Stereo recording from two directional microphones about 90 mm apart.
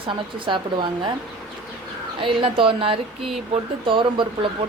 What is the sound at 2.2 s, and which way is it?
Speech, 80° right.